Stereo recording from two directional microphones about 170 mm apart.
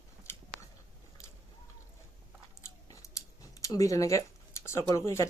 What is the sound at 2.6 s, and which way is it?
Scissors, 20° left (ahead or behind).